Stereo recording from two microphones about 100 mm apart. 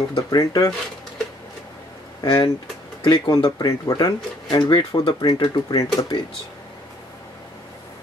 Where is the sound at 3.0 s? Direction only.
50° left (ahead or behind).